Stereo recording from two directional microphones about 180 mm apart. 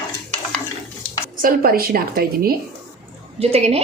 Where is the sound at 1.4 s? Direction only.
55° right (ahead or behind).